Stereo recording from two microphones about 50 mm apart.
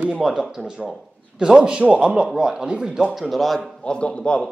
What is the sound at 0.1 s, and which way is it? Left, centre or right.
A man's voice, centre.